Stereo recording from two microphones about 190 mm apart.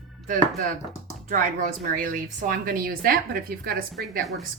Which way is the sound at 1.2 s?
45° right (ahead or behind).